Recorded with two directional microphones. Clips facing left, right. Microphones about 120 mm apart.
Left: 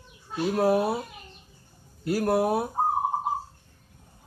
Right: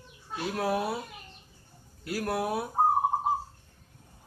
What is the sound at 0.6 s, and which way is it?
Speech, 35° left (ahead or behind).